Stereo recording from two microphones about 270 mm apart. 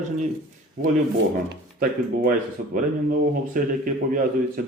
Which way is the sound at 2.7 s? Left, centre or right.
Right.